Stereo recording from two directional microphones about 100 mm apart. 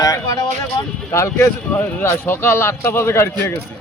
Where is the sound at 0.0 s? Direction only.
35° left (ahead or behind).